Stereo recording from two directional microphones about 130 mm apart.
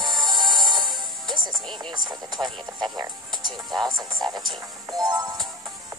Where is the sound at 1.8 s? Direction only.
35° right (ahead or behind).